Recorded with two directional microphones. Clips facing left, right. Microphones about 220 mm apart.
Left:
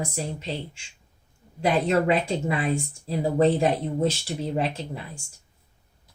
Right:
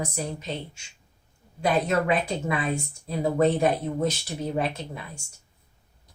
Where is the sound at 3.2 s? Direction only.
30° left (ahead or behind).